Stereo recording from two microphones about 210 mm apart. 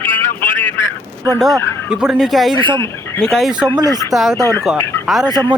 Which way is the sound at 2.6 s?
20° right (ahead or behind).